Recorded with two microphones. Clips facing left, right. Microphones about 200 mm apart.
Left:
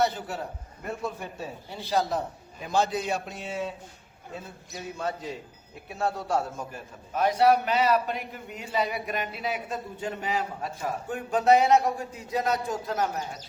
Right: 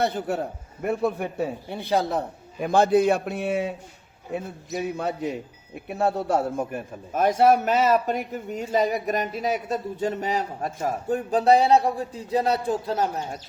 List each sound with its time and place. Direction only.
0.0 s a man's voice: 55° right (ahead or behind)
4.8 s a man's voice: 65° right (ahead or behind); by 13.4 s 30° right (ahead or behind)